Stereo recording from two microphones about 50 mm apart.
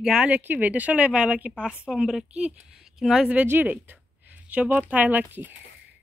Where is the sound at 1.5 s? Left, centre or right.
Centre.